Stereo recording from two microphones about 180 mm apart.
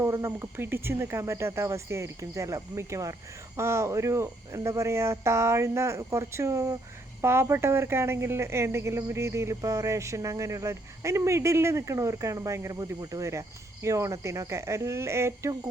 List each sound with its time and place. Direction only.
0.0 s speech: 15° right (ahead or behind)